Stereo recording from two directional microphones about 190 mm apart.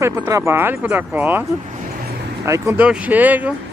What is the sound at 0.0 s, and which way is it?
Speech, 15° right (ahead or behind).